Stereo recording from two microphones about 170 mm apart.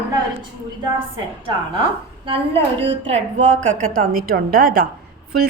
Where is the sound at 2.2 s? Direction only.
35° right (ahead or behind); by 4.9 s 60° right (ahead or behind).